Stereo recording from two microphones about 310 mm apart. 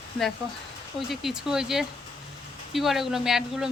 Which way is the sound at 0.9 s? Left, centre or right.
Centre.